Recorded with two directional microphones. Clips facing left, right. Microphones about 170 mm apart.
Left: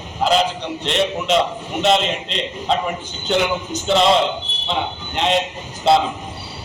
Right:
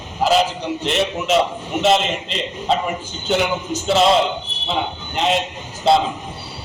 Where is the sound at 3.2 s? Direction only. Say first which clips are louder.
Even; 5° right (ahead or behind).